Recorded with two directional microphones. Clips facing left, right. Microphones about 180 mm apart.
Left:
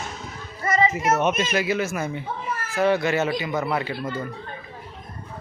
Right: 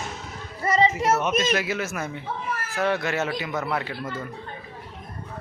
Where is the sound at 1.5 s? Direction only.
Centre (ahead or behind).